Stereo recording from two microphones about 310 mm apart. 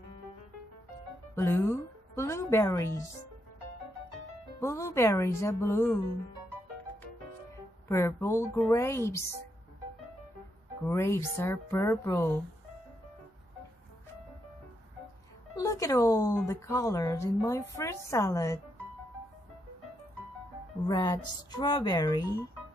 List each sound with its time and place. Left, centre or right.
1.3 s music: centre
4.6 s speech: centre
7.9 s speech: centre
10.9 s speech: centre
15.5 s speech: centre
20.8 s speech: centre